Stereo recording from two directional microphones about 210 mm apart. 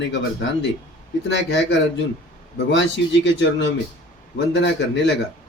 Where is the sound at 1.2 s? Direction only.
60° left (ahead or behind).